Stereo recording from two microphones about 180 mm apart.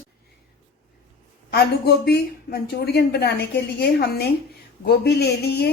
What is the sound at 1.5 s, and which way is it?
Speech, 60° left (ahead or behind).